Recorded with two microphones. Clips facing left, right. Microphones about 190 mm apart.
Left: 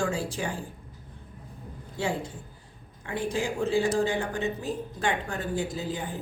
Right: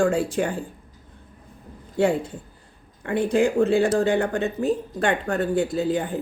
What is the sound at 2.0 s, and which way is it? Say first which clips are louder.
Speech: right 9 dB; 60° right (ahead or behind).